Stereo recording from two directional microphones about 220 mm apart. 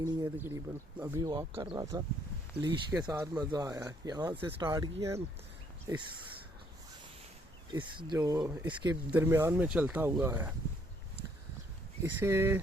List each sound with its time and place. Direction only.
0.0 s speech: 10° right (ahead or behind)
7.7 s speech: 20° right (ahead or behind)
12.0 s speech: 10° right (ahead or behind)